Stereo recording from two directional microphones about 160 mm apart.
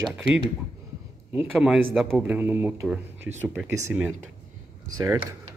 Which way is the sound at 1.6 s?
5° right (ahead or behind).